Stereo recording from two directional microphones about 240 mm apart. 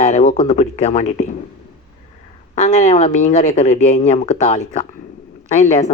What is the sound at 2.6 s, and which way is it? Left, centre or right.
A man's voice, left.